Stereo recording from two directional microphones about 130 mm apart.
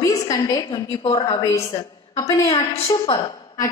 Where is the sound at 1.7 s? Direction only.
35° left (ahead or behind).